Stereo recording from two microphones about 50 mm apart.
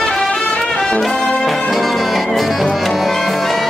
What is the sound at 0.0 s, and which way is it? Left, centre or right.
Music, centre.